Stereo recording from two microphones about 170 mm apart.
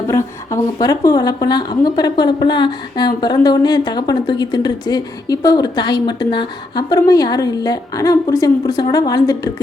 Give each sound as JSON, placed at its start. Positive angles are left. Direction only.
{"t": 0.1, "sound": "a woman's voice", "side_deg": 15}